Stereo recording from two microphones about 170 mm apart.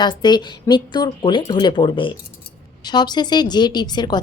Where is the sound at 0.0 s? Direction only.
25° left (ahead or behind).